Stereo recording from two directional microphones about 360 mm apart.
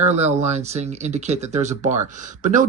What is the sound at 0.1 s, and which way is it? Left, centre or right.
Speech, centre.